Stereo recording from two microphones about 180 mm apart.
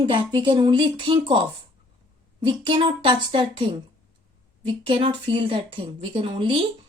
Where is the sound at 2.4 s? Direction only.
30° right (ahead or behind).